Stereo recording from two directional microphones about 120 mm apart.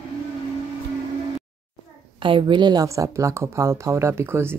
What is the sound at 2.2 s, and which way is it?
Speech, 45° right (ahead or behind).